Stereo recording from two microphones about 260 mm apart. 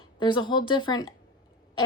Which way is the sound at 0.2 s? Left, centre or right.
Centre.